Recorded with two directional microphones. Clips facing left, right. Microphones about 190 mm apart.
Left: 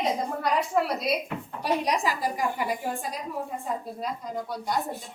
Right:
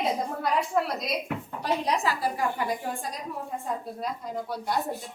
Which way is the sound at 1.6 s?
15° left (ahead or behind).